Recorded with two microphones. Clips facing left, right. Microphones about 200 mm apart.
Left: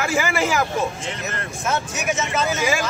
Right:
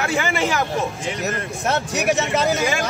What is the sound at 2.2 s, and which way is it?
Speech, 35° right (ahead or behind).